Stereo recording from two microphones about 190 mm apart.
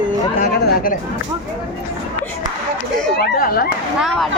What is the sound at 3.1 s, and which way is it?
Speech, 55° left (ahead or behind).